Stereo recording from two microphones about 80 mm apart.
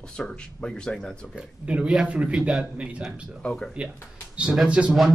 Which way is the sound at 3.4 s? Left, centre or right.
Centre.